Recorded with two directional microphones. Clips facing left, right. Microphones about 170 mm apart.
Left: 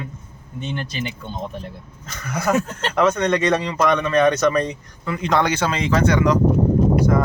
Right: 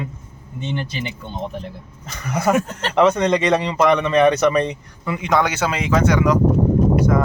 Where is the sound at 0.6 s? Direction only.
20° right (ahead or behind).